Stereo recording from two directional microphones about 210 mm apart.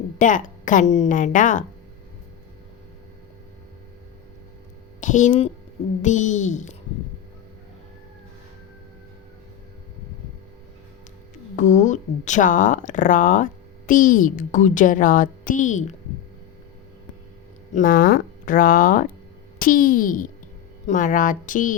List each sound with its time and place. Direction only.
0.2 s speech: 40° left (ahead or behind)
4.9 s a woman's voice: 35° left (ahead or behind)
11.5 s speech: 35° left (ahead or behind)
17.7 s speech: 40° left (ahead or behind)